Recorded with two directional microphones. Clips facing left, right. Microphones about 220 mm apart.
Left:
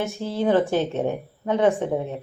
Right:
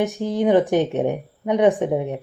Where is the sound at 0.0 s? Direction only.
15° right (ahead or behind).